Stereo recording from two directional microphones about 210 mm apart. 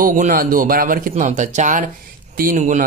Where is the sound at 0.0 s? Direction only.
40° right (ahead or behind).